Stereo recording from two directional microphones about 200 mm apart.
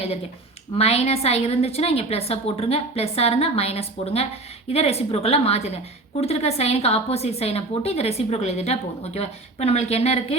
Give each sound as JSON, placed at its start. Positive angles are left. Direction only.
{"t": 0.8, "sound": "a woman's voice", "side_deg": 30}